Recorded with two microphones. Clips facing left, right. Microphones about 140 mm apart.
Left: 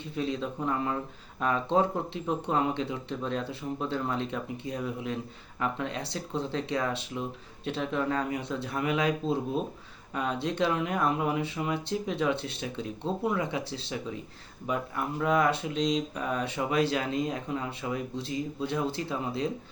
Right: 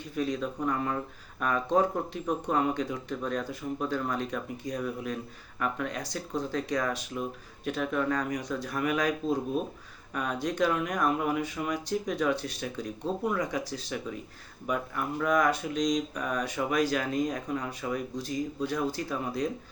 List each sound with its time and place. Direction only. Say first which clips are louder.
0.2 s speech: right 1 dB; 25° left (ahead or behind)